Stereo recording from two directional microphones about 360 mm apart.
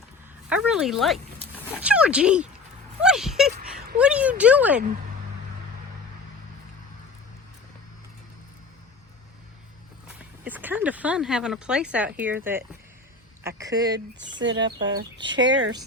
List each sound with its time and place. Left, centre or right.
0.4 s speech: centre
10.4 s speech: centre
13.6 s speech: centre
13.9 s speech: right